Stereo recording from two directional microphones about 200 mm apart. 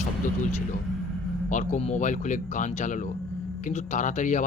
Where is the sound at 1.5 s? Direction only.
35° left (ahead or behind).